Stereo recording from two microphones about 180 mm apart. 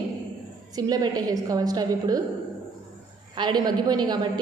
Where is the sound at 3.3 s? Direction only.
25° right (ahead or behind).